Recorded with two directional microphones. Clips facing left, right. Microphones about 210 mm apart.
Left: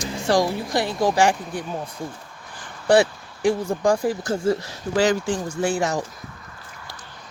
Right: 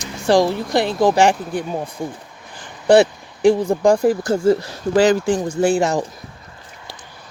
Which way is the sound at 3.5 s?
25° right (ahead or behind).